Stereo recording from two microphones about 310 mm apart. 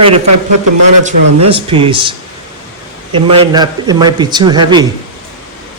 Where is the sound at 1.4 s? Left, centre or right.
Centre.